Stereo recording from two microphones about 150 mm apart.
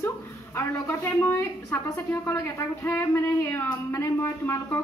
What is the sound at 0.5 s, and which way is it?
A woman's voice, 15° left (ahead or behind).